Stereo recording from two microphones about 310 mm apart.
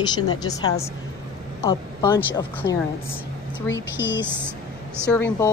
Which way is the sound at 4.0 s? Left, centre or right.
Left.